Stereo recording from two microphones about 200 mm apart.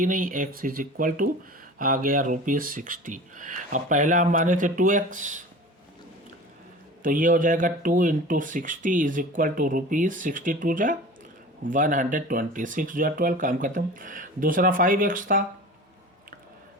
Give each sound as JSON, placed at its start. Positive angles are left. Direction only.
{"t": 0.0, "sound": "speech", "side_deg": -45}
{"t": 7.0, "sound": "speech", "side_deg": -40}